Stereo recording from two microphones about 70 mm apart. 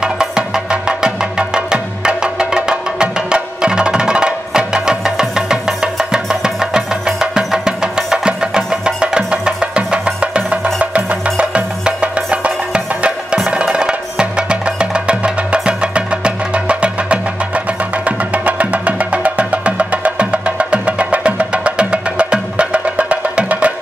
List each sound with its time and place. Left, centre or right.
0.0 s music: centre